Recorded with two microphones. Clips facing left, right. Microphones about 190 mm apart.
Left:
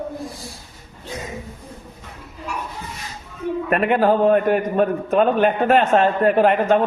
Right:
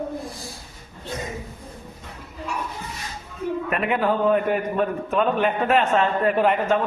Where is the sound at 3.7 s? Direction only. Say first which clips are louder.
Left 7 dB; 55° left (ahead or behind).